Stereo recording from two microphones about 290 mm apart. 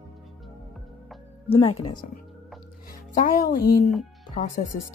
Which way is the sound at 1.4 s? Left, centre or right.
Centre.